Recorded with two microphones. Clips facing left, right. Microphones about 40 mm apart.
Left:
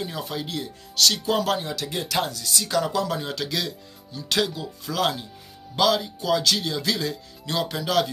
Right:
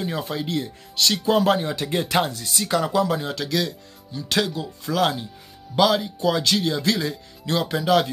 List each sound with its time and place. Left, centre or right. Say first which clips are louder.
0.0 s speech: right 3 dB; centre
1.9 s speech: right 5 dB; right; by 8.1 s centre